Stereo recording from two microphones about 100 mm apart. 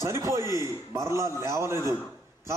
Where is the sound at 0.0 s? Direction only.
30° right (ahead or behind).